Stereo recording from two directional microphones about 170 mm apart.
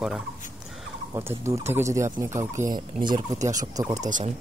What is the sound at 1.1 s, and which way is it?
Speech, 15° right (ahead or behind).